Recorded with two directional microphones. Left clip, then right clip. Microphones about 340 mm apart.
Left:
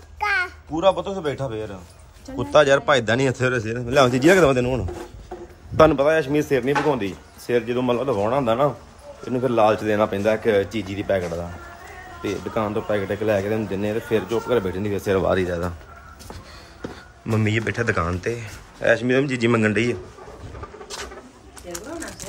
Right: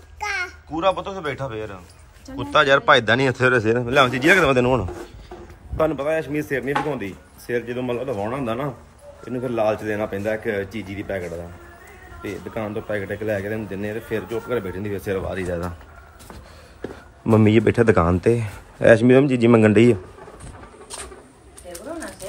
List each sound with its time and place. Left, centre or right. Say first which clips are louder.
0.2 s a child's voice: left 4 dB; centre
5.8 s speech: left 6 dB; centre
15.1 s speech: left 7 dB; centre
17.3 s speech: right 7 dB; centre